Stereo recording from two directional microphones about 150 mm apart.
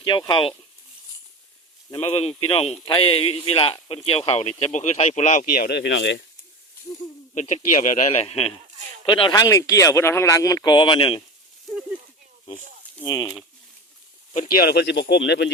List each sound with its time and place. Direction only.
0.0 s speech: 30° left (ahead or behind)
2.0 s speech: 40° left (ahead or behind); by 5.7 s 70° left (ahead or behind)
7.3 s speech: 50° left (ahead or behind)
9.0 s speech: 35° left (ahead or behind)
11.6 s snake: 5° right (ahead or behind)
13.0 s speech: 20° left (ahead or behind)
14.4 s speech: 85° left